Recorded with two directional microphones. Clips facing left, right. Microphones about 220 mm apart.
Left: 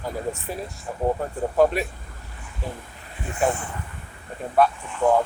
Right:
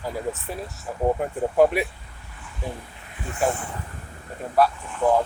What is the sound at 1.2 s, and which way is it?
Speech, 15° right (ahead or behind).